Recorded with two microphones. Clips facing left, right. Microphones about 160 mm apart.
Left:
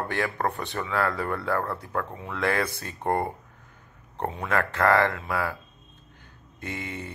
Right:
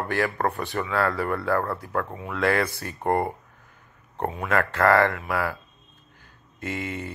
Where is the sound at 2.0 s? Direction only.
15° right (ahead or behind).